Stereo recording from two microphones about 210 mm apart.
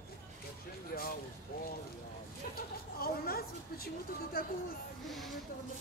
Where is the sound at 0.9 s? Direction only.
45° left (ahead or behind).